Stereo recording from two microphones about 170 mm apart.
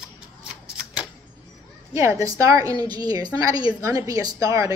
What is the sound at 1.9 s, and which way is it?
A woman's voice, 15° right (ahead or behind).